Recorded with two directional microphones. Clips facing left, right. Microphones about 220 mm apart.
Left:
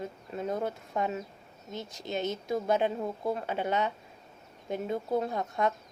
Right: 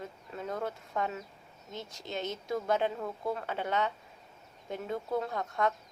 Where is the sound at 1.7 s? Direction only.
10° left (ahead or behind).